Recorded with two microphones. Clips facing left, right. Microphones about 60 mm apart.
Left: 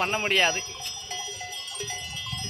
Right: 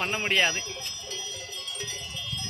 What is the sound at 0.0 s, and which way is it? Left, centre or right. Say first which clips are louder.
Speech: left 3 dB; centre.